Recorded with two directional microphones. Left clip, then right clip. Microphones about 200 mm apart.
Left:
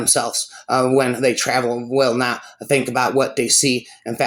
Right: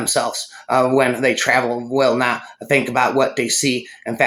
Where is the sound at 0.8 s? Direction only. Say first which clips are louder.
Right 1 dB; 40° left (ahead or behind).